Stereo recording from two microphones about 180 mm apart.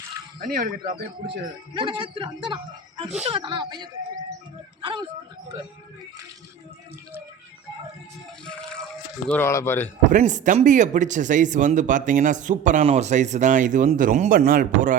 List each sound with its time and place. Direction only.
0.3 s speech: 50° right (ahead or behind)
1.7 s a woman's voice: 25° right (ahead or behind)
9.3 s a man's voice: 15° left (ahead or behind)
10.1 s speech: 45° right (ahead or behind)